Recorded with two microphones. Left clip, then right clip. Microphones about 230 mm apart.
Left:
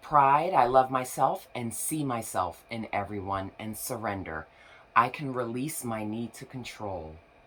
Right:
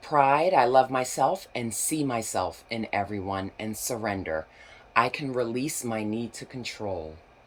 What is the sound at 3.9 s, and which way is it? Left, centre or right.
Speech, left.